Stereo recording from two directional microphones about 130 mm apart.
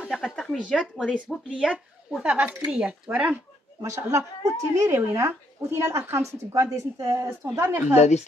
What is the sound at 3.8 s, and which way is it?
Speech, 25° right (ahead or behind).